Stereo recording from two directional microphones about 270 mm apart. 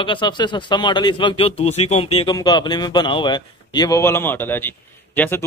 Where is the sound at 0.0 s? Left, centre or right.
Centre.